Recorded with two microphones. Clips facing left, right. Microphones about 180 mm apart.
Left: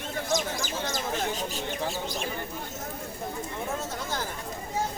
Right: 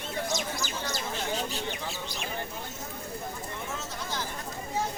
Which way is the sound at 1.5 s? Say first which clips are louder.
Left 3 dB; 45° left (ahead or behind).